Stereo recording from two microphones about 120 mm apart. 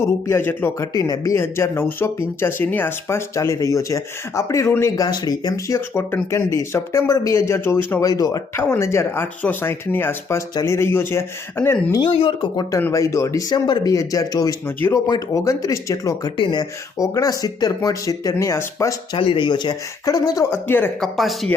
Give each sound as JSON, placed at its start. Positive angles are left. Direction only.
{"t": 0.0, "sound": "speech", "side_deg": 20}
{"t": 0.9, "sound": "speech", "side_deg": 30}
{"t": 8.0, "sound": "speech", "side_deg": 30}
{"t": 12.1, "sound": "speech", "side_deg": 50}
{"t": 12.9, "sound": "speech", "side_deg": 25}
{"t": 16.4, "sound": "speech", "side_deg": 40}
{"t": 17.0, "sound": "speech", "side_deg": 30}
{"t": 19.1, "sound": "speech", "side_deg": 45}
{"t": 21.0, "sound": "speech", "side_deg": 0}